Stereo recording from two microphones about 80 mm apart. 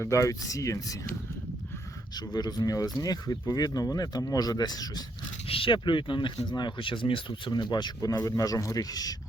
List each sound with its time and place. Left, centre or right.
0.0 s speech: left
2.1 s speech: left
5.6 s speech: left